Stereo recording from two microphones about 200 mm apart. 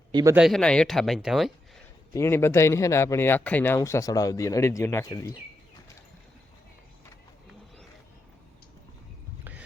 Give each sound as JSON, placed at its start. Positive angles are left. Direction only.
{"t": 0.1, "sound": "speech", "side_deg": -20}
{"t": 0.3, "sound": "speech", "side_deg": 0}
{"t": 2.1, "sound": "speech", "side_deg": 10}
{"t": 9.4, "sound": "a sound", "side_deg": -10}